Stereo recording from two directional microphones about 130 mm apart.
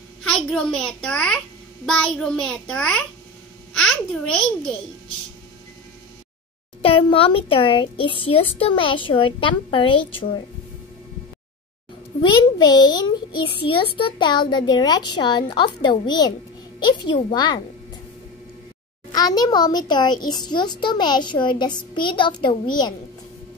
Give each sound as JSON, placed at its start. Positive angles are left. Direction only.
{"t": 0.3, "sound": "a child's voice", "side_deg": 5}
{"t": 6.8, "sound": "a child's voice", "side_deg": 45}
{"t": 12.2, "sound": "a child's voice", "side_deg": 35}
{"t": 19.1, "sound": "a child's voice", "side_deg": 30}